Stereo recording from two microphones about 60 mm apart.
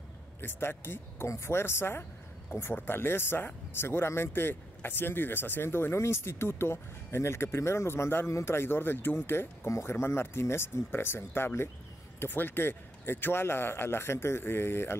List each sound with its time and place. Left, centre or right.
0.4 s speech: left
9.7 s speech: left